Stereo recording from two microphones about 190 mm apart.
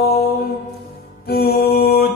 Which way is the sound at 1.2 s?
55° left (ahead or behind).